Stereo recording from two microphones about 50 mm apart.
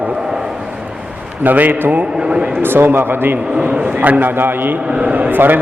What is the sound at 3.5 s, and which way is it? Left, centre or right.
A man's voice, right.